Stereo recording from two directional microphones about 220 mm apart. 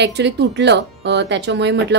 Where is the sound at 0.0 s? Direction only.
50° right (ahead or behind).